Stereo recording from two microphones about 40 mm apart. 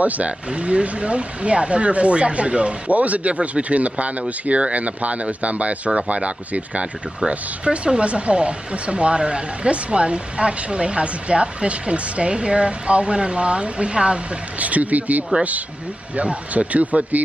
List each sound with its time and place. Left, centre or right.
0.0 s speech: right
0.5 s speech: right
14.6 s speech: right